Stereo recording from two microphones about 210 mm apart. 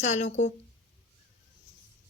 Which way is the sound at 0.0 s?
35° left (ahead or behind).